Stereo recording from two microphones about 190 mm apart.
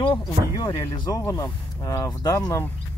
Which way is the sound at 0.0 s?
20° left (ahead or behind).